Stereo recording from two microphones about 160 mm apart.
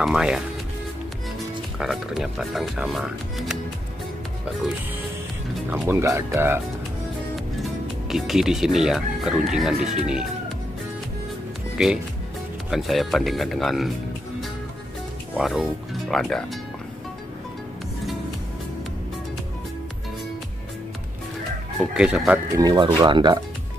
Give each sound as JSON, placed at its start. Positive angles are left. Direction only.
{"t": 0.0, "sound": "speech", "side_deg": -5}
{"t": 1.8, "sound": "speech", "side_deg": 0}
{"t": 5.7, "sound": "speech", "side_deg": -15}
{"t": 8.1, "sound": "speech", "side_deg": 0}
{"t": 11.8, "sound": "speech", "side_deg": 0}
{"t": 15.3, "sound": "speech", "side_deg": -5}
{"t": 21.9, "sound": "speech", "side_deg": -5}
{"t": 22.6, "sound": "speech", "side_deg": -25}